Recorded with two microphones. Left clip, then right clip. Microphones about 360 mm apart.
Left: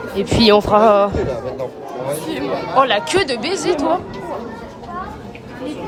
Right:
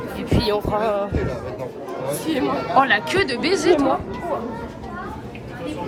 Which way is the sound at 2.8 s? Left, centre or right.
Centre.